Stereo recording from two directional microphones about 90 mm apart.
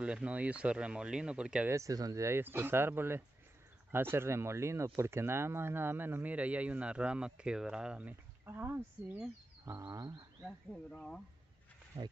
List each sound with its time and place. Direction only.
0.0 s speech: 15° right (ahead or behind)
1.7 s speech: 35° right (ahead or behind); by 8.2 s 10° right (ahead or behind)
8.5 s speech: 25° right (ahead or behind)
9.7 s a sound: 35° right (ahead or behind)
10.4 s speech: 10° left (ahead or behind)
11.9 s speech: 90° right